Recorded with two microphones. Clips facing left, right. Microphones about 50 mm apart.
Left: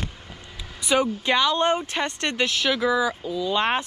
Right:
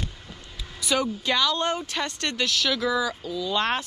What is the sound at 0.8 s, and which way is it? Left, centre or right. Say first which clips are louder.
Speech: left 3 dB; left.